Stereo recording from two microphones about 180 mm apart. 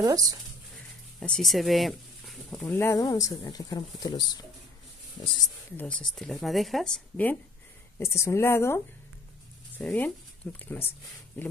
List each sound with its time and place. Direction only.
0.0 s speech: 20° right (ahead or behind)
1.2 s speech: centre (ahead or behind); by 5.3 s 30° left (ahead or behind)
5.7 s speech: 10° left (ahead or behind)